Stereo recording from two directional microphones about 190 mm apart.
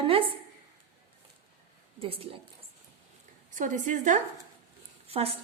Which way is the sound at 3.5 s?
40° right (ahead or behind).